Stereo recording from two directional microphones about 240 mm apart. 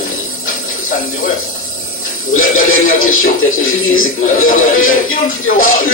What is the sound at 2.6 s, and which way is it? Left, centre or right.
Speech, left.